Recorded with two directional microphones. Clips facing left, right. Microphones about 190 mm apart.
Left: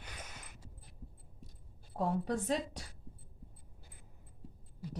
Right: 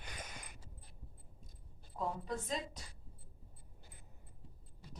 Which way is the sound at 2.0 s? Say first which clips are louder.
Left 6 dB; 70° left (ahead or behind).